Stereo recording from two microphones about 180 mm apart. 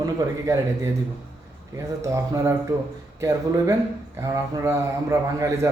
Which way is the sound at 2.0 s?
15° right (ahead or behind).